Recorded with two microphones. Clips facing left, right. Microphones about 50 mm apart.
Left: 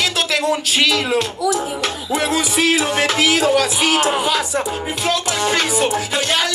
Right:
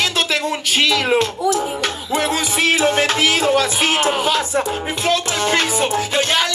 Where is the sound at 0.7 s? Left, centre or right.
Right.